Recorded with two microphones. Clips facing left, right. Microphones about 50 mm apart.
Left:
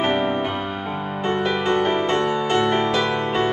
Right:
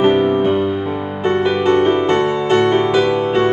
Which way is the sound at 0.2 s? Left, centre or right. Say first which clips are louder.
Right 7 dB; centre.